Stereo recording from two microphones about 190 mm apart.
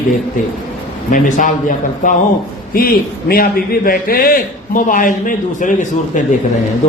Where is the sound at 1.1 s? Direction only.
45° left (ahead or behind).